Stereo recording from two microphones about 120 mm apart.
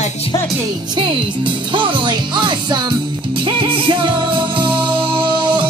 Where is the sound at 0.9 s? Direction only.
40° right (ahead or behind).